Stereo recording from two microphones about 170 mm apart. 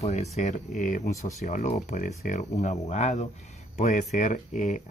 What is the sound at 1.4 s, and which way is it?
Speech, 45° left (ahead or behind).